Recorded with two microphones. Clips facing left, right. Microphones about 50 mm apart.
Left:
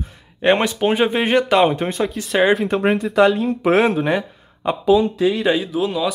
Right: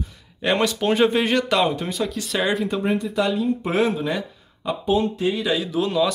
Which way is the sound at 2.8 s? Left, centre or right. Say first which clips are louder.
Left 7 dB; left.